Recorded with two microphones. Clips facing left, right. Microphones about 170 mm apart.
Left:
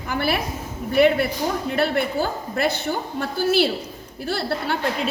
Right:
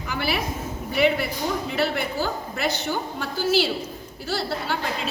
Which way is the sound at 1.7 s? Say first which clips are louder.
Left 5 dB; 55° left (ahead or behind).